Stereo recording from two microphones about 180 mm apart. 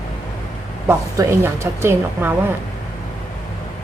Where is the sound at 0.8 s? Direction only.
15° right (ahead or behind).